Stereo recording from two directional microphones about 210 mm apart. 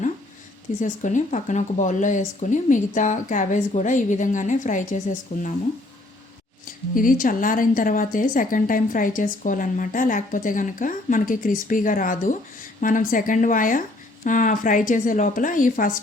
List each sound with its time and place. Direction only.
0.8 s a woman's voice: 35° left (ahead or behind)
6.9 s a woman's voice: 40° left (ahead or behind)